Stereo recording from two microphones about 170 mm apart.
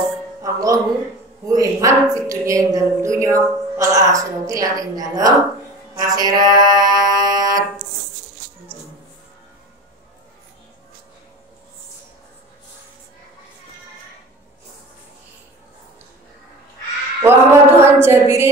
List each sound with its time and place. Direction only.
0.4 s music: 20° right (ahead or behind)
1.5 s a woman's voice: 20° right (ahead or behind)
17.2 s a sound: 15° right (ahead or behind)